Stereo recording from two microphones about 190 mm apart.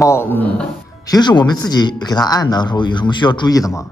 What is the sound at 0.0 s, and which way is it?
Speech, 15° left (ahead or behind).